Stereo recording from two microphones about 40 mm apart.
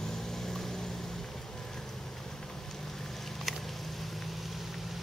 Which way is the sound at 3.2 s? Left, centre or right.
Centre.